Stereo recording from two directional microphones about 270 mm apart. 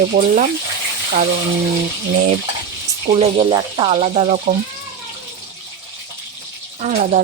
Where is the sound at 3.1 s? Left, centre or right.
Right.